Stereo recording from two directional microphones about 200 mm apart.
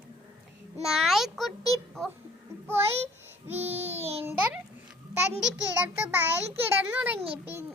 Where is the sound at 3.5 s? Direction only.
10° right (ahead or behind).